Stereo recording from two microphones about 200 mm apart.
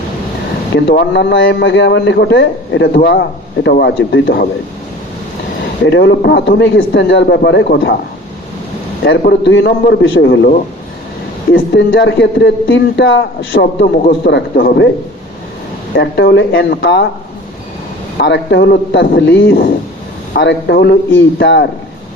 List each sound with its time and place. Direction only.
0.9 s a man's voice: 55° left (ahead or behind)
5.8 s a man's voice: 60° left (ahead or behind)
9.2 s a man's voice: 60° left (ahead or behind)
11.5 s a man's voice: 60° left (ahead or behind)
16.0 s a man's voice: 60° left (ahead or behind)
18.2 s a man's voice: 60° left (ahead or behind)